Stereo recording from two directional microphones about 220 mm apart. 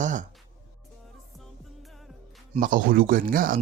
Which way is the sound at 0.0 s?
35° right (ahead or behind).